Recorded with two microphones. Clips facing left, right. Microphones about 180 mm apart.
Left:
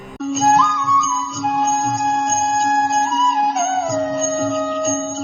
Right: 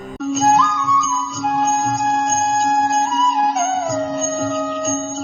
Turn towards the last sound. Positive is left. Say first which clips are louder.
# left 1 dB
turn(degrees=0)  # may be behind; listen again after turning